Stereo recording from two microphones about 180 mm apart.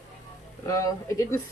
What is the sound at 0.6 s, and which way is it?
Speech, 20° left (ahead or behind).